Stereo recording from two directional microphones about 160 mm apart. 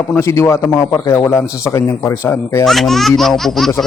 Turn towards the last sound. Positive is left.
turn(degrees=0)  # may be behind; listen again after turning